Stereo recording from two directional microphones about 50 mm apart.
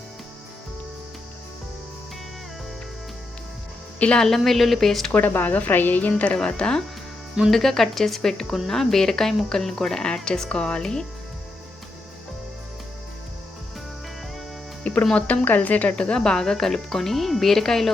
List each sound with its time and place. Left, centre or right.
4.2 s speech: centre
5.1 s speech: left
6.1 s speech: left
6.3 s speech: centre
7.4 s speech: centre
14.8 s music: left
15.4 s speech: left
16.0 s speech: centre